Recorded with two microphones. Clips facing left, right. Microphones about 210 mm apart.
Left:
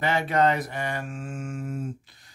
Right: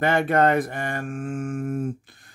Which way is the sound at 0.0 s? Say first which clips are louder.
Right 3 dB; 55° right (ahead or behind).